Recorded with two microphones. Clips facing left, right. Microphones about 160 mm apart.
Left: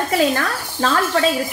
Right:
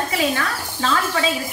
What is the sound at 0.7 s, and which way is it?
Speech, 45° left (ahead or behind).